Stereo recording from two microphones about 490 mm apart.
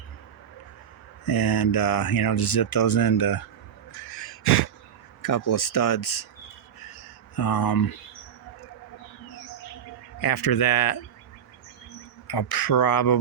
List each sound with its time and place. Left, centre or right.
1.2 s speech: left
5.2 s speech: left
7.3 s speech: left
10.2 s speech: left
12.3 s speech: left